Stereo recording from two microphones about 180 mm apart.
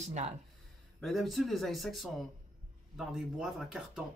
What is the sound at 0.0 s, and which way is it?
Speech, 40° right (ahead or behind).